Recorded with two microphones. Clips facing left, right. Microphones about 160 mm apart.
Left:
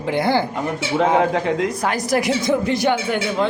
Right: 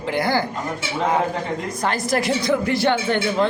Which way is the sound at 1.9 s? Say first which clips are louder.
Right 2 dB; 15° left (ahead or behind).